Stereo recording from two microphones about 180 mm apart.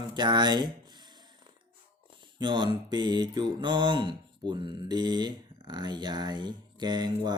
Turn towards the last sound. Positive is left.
turn(degrees=-25)  # may be behind; listen again after turning